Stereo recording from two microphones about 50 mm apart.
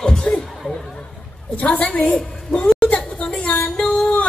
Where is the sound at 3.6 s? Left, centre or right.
Centre.